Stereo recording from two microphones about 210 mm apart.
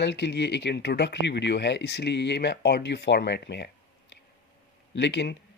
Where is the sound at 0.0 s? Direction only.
55° left (ahead or behind).